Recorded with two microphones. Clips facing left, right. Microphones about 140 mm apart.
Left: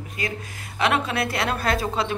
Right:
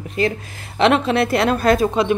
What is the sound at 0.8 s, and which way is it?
Speech, 25° right (ahead or behind).